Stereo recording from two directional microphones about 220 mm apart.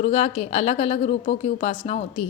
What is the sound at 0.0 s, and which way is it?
A woman's voice, 30° left (ahead or behind).